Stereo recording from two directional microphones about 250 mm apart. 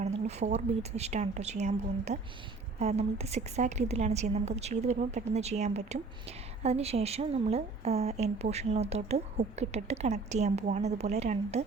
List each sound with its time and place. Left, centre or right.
0.3 s a woman's voice: right